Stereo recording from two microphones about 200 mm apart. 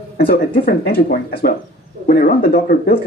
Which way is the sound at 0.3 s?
50° left (ahead or behind).